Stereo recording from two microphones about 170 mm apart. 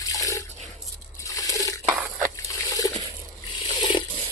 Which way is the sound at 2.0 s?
10° right (ahead or behind).